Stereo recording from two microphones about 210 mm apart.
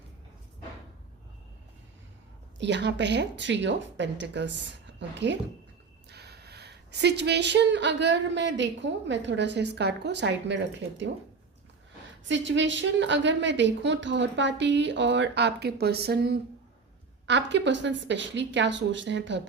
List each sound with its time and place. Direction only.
2.6 s speech: 55° right (ahead or behind)
12.3 s speech: 60° right (ahead or behind)